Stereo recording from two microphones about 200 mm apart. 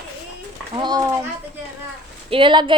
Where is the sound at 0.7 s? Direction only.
20° right (ahead or behind).